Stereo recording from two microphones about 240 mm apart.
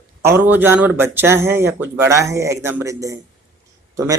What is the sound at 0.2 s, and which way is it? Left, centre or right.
Speech, centre.